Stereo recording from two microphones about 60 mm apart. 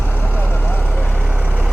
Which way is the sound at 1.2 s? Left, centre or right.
Centre.